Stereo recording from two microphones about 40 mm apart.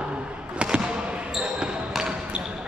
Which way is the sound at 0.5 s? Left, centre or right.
Right.